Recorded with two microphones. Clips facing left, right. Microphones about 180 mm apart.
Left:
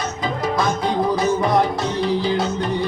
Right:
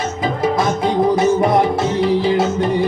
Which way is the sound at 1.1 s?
25° right (ahead or behind).